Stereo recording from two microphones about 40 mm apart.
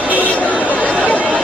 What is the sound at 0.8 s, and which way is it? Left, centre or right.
Chatter, right.